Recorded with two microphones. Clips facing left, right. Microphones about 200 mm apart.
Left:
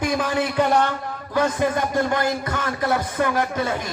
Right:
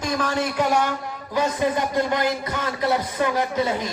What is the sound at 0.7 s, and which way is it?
A man's voice, 15° right (ahead or behind).